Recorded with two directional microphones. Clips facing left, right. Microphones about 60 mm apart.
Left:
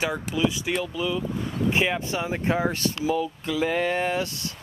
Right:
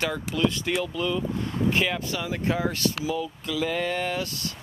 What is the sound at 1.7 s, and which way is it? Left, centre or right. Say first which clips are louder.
Speech: left 2 dB; left.